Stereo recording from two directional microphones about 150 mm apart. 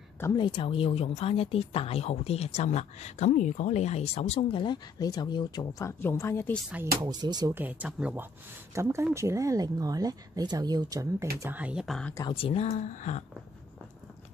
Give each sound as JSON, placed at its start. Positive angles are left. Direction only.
{"t": 0.4, "sound": "speech", "side_deg": 35}
{"t": 7.0, "sound": "speech", "side_deg": -25}
{"t": 7.5, "sound": "speech", "side_deg": -10}
{"t": 11.3, "sound": "speech", "side_deg": -15}
{"t": 12.3, "sound": "speech", "side_deg": 40}